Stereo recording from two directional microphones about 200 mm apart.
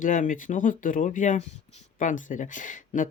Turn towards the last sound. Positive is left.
turn(degrees=40)  # may be behind; listen again after turning